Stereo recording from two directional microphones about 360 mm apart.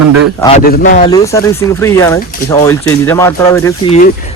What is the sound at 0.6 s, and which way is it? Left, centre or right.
Speech, left.